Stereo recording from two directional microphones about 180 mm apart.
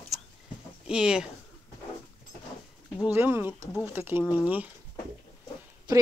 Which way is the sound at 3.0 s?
10° right (ahead or behind).